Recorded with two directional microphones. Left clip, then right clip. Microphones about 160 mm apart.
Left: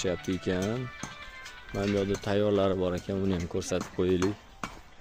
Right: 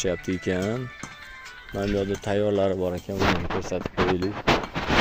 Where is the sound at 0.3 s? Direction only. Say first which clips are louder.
Right 4 dB; 15° right (ahead or behind).